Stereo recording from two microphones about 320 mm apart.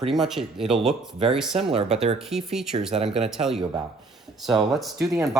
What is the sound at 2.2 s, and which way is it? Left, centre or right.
Speech, centre.